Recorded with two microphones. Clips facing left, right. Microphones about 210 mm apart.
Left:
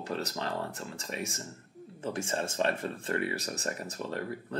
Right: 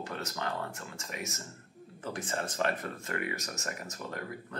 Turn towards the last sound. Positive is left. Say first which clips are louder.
# left 4 dB
turn(degrees=30)  # may be behind; listen again after turning